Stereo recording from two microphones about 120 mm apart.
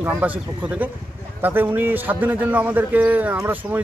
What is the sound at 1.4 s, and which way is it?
A man's voice, 15° right (ahead or behind).